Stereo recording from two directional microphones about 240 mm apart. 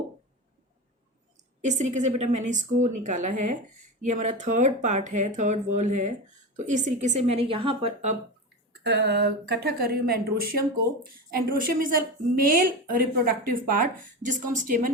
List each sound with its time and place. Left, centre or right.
1.6 s speech: right
8.8 s speech: right